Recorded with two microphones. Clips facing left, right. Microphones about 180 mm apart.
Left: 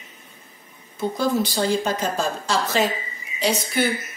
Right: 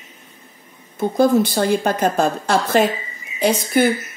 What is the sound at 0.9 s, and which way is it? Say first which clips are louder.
Speech: right 7 dB; 55° right (ahead or behind).